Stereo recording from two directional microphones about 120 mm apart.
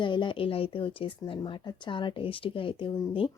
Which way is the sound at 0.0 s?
40° left (ahead or behind).